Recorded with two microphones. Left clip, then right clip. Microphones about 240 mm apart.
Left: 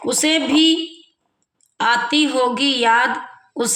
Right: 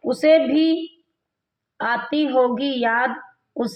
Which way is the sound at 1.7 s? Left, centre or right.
Centre.